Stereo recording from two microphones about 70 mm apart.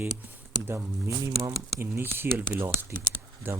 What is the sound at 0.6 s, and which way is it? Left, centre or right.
Speech, right.